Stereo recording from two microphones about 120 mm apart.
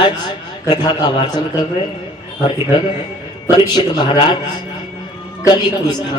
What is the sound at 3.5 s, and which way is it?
Speech, 40° left (ahead or behind).